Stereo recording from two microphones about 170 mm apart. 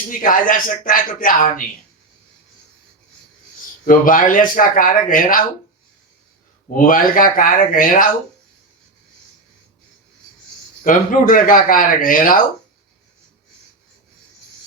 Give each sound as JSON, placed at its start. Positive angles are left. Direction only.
{"t": 0.1, "sound": "speech", "side_deg": 50}
{"t": 3.8, "sound": "speech", "side_deg": 55}
{"t": 6.7, "sound": "speech", "side_deg": 55}
{"t": 10.8, "sound": "speech", "side_deg": 55}